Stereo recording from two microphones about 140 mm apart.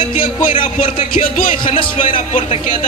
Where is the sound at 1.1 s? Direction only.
65° left (ahead or behind).